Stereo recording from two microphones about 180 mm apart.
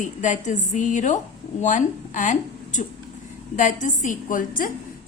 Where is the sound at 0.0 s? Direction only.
45° left (ahead or behind).